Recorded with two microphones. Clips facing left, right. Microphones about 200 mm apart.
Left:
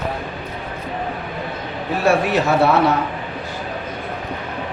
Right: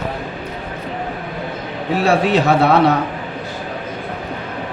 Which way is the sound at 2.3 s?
70° right (ahead or behind).